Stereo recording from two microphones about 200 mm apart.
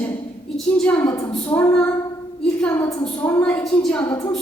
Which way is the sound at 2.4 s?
5° left (ahead or behind).